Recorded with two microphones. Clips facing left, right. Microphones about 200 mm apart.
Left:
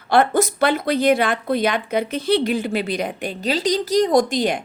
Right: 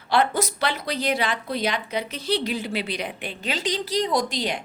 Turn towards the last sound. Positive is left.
turn(degrees=50)  # may be behind; listen again after turning